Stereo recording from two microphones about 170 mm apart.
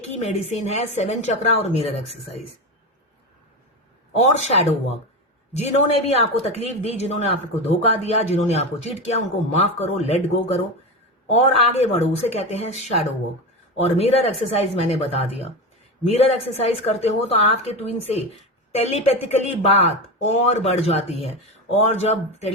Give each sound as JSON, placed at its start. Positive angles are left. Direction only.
{"t": 0.0, "sound": "a woman's voice", "side_deg": 40}
{"t": 4.1, "sound": "speech", "side_deg": 40}
{"t": 11.3, "sound": "speech", "side_deg": 40}